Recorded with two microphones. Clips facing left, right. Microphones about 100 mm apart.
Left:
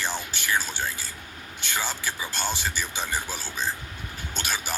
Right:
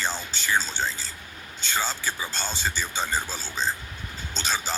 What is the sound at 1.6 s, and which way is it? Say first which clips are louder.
Speech: right 2 dB; 15° left (ahead or behind).